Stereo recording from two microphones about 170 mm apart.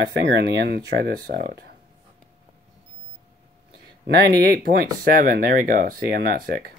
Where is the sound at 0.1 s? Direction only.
65° right (ahead or behind).